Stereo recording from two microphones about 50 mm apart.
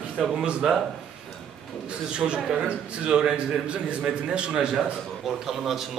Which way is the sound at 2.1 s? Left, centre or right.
Centre.